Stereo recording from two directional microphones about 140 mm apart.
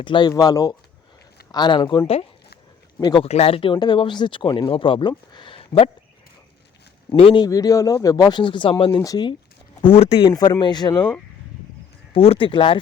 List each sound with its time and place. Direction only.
0.0 s speech: 35° left (ahead or behind)
7.2 s speech: 40° left (ahead or behind)
7.4 s speech: 25° left (ahead or behind)
9.8 s speech: 45° left (ahead or behind)
10.3 s speech: 30° left (ahead or behind)
12.1 s speech: 40° left (ahead or behind)